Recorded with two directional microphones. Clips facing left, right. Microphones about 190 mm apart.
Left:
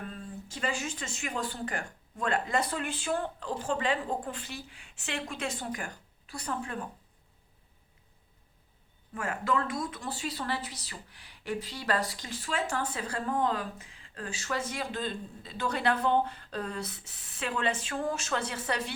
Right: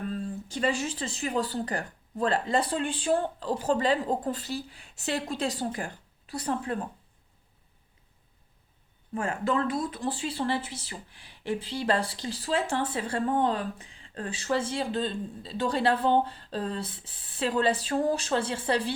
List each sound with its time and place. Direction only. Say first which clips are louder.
0.1 s speech: right 8 dB; 30° right (ahead or behind)
9.1 s speech: right 3 dB; 30° right (ahead or behind)